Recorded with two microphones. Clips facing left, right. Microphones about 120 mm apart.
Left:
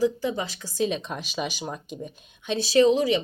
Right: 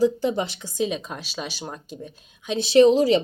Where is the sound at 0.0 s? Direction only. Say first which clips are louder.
Right 4 dB; 30° right (ahead or behind).